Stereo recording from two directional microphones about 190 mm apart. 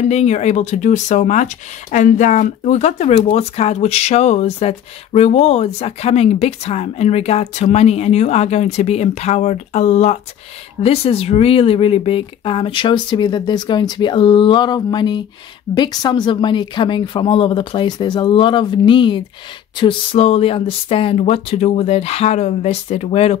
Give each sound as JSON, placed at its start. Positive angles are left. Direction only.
{"t": 0.1, "sound": "speech", "side_deg": 35}